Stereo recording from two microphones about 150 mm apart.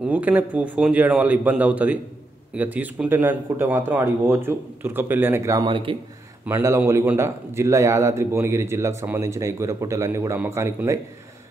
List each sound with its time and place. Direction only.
0.0 s speech: 10° right (ahead or behind)
5.7 s speech: 35° right (ahead or behind)
6.4 s a man's voice: 15° right (ahead or behind)